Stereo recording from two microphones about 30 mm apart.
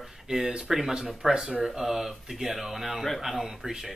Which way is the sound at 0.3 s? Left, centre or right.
Right.